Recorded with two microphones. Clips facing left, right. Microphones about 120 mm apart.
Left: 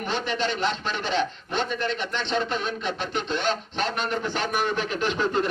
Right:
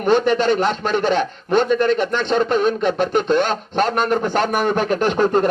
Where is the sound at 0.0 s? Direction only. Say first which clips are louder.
Right 11 dB; 50° right (ahead or behind).